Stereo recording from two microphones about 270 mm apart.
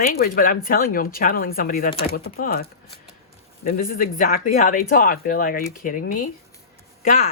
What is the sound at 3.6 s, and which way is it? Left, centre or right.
A woman's voice, left.